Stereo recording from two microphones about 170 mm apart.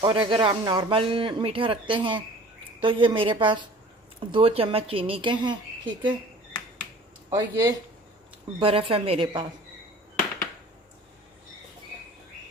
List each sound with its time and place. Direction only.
0.0 s a woman's voice: 25° right (ahead or behind)
7.3 s a woman's voice: 20° right (ahead or behind)